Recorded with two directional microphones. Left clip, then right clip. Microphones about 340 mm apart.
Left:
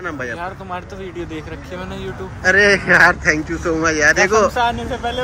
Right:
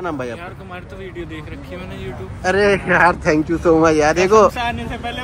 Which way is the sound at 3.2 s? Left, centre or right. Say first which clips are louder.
Right 1 dB; centre.